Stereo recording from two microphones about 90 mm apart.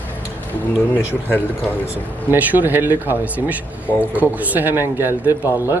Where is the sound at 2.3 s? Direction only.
20° right (ahead or behind).